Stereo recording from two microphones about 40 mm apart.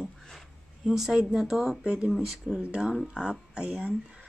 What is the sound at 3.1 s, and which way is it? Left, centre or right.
Speech, right.